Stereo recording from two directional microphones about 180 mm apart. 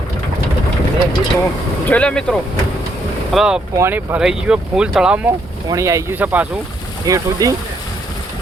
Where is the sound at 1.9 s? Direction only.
5° left (ahead or behind).